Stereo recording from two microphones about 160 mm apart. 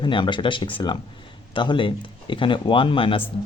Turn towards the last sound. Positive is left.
turn(degrees=30)  # may be behind; listen again after turning